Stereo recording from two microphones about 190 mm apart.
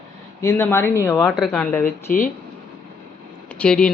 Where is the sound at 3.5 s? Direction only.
5° left (ahead or behind).